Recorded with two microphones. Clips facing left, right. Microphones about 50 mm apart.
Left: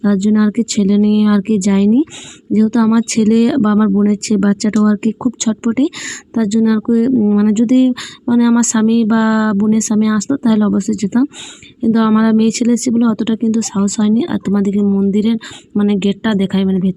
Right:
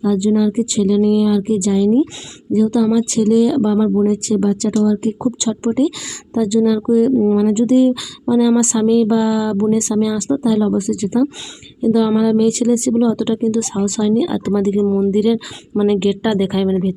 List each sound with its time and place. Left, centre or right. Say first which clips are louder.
0.3 s speech: left 2 dB; left
2.5 s speech: left 3 dB; left
3.6 s speech: left 3 dB; left
4.0 s speech: left 2 dB; left
5.2 s speech: left 3 dB; left
6.5 s speech: left 1 dB; left
12.9 s speech: left 2 dB; left